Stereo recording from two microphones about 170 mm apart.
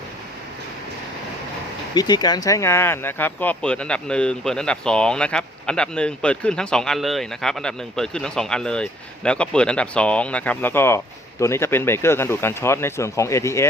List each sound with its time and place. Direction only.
2.0 s speech: 25° left (ahead or behind)